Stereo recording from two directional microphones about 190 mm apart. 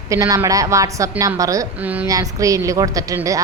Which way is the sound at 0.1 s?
15° right (ahead or behind).